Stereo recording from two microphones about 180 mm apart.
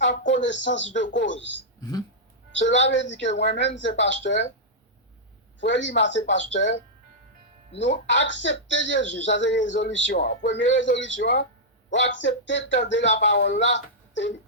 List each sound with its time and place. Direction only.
0.2 s speech: 90° left
1.8 s speech: 20° left (ahead or behind)
2.5 s a woman's voice: 85° left
3.8 s speech: 85° left
5.5 s speech: 90° left
8.0 s speech: 90° left
10.1 s speech: 60° left (ahead or behind); by 13.1 s 90° left
13.2 s speech: 75° left (ahead or behind)